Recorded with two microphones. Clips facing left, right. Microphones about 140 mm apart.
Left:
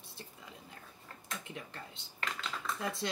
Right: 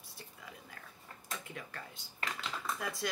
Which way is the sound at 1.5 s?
25° left (ahead or behind).